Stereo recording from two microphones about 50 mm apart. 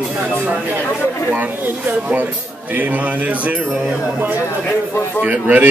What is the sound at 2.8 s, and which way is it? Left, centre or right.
Speech, right.